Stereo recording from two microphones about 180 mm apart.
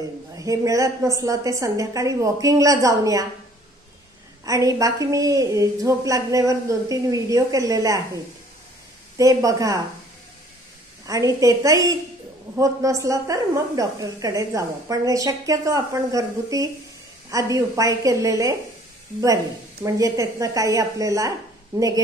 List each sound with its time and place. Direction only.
0.4 s a woman's voice: 20° right (ahead or behind)
4.5 s a woman's voice: 20° right (ahead or behind)
9.2 s a woman's voice: 20° right (ahead or behind)
11.1 s a woman's voice: 20° right (ahead or behind)